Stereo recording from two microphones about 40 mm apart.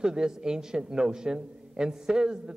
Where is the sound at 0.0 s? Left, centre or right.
Centre.